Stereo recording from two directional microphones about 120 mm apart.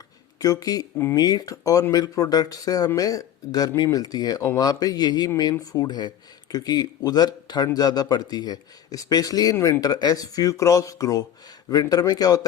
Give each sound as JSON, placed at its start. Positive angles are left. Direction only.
{"t": 0.3, "sound": "speech", "side_deg": 30}